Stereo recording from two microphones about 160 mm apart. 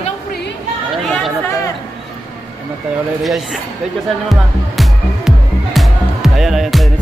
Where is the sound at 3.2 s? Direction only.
5° right (ahead or behind).